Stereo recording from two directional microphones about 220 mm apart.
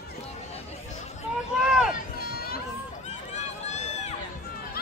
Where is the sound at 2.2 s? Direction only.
45° left (ahead or behind).